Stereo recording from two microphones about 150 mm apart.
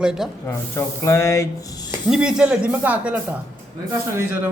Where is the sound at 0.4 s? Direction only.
15° left (ahead or behind).